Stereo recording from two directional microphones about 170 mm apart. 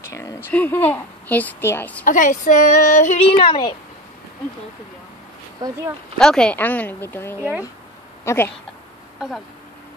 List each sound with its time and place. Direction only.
0.1 s speech: 15° left (ahead or behind)
2.0 s speech: 50° left (ahead or behind); by 3.7 s 30° left (ahead or behind)
5.6 s speech: 15° right (ahead or behind)
6.1 s speech: 5° left (ahead or behind)